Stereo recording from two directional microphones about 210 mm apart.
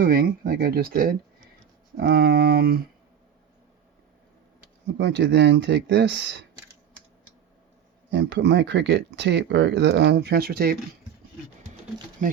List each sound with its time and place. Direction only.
0.0 s speech: 45° right (ahead or behind)
4.9 s speech: 55° right (ahead or behind)
8.1 s speech: 55° right (ahead or behind)
12.2 s speech: 40° right (ahead or behind)